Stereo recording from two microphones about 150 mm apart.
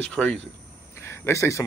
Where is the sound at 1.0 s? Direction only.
15° left (ahead or behind).